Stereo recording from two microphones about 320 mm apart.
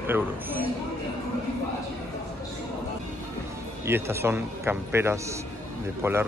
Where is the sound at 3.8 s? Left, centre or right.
Centre.